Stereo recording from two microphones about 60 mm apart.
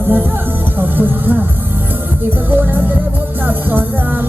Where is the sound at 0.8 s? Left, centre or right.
Right.